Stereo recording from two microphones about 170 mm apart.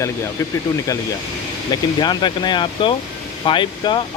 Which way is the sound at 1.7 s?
25° left (ahead or behind).